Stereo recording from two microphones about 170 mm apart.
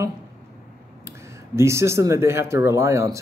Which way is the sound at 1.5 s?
15° right (ahead or behind).